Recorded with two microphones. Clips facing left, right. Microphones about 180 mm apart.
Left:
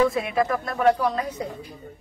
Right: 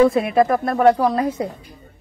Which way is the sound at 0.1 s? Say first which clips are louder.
Right 7 dB; 60° right (ahead or behind).